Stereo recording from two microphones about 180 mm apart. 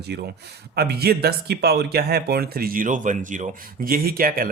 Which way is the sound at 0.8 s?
60° right (ahead or behind).